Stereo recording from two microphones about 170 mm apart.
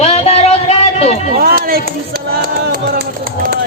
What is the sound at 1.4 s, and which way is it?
Music, 60° right (ahead or behind).